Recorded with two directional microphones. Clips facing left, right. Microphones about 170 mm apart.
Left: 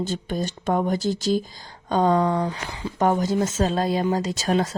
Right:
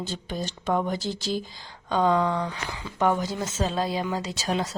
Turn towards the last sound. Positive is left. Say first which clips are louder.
# left 5 dB
turn(degrees=45)  # may be behind; listen again after turning